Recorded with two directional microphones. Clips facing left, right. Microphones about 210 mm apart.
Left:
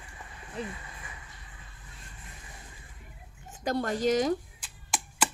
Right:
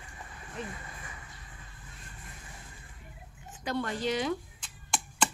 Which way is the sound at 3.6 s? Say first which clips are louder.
Left 4 dB; 45° left (ahead or behind).